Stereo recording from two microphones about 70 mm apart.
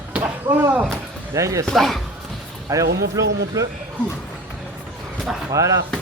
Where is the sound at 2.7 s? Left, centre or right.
Right.